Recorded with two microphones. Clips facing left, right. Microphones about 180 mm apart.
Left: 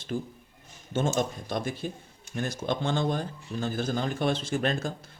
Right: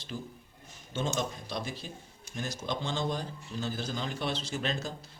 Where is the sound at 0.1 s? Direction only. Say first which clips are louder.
Left 7 dB; 45° left (ahead or behind).